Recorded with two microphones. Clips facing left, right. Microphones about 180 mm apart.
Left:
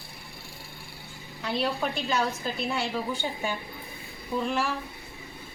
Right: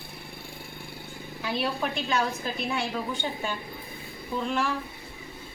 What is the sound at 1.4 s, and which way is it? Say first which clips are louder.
A woman's voice: left 1 dB; centre (ahead or behind).